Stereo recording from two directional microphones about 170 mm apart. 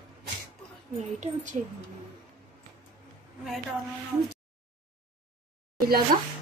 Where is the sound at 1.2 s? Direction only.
50° right (ahead or behind).